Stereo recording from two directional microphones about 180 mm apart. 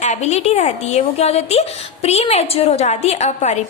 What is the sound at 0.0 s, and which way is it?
A woman's voice, 40° left (ahead or behind).